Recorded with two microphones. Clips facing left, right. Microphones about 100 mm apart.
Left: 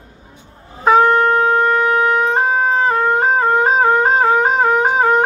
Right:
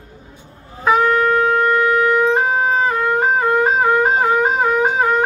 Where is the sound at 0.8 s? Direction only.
35° left (ahead or behind).